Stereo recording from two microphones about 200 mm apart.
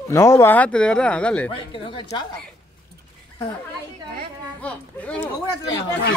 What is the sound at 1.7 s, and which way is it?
Speech, 25° left (ahead or behind).